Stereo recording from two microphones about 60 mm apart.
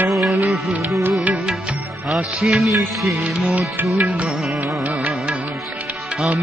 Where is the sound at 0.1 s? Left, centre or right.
Right.